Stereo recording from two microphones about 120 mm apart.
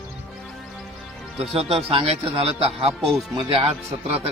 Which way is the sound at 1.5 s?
55° right (ahead or behind).